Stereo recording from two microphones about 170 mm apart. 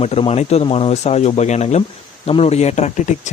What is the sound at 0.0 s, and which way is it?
Speech, 35° left (ahead or behind).